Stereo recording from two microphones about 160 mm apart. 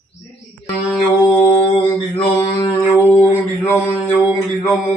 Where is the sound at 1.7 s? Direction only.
35° left (ahead or behind).